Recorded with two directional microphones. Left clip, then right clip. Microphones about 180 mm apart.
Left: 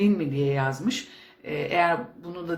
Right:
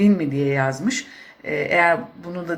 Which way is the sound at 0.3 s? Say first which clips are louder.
Right 5 dB; 35° right (ahead or behind).